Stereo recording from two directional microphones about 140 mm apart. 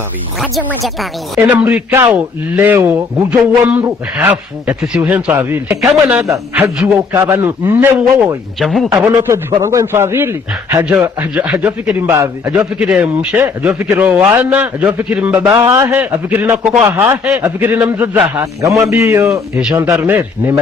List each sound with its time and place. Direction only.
0.4 s speech: centre (ahead or behind)
1.5 s a man's voice: 10° right (ahead or behind)
6.6 s a man's voice: 10° right (ahead or behind)
8.5 s speech: centre (ahead or behind)
8.9 s a man's voice: 20° right (ahead or behind)